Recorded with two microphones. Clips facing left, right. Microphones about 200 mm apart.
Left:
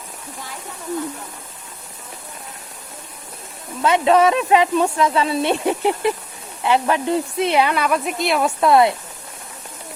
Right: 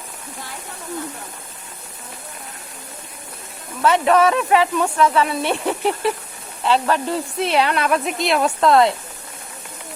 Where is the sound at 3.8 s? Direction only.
20° left (ahead or behind).